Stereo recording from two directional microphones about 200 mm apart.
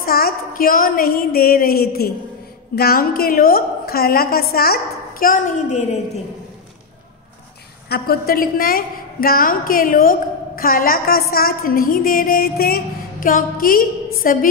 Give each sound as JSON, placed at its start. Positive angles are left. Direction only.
{"t": 0.0, "sound": "a woman's voice", "side_deg": 45}
{"t": 7.9, "sound": "a woman's voice", "side_deg": 50}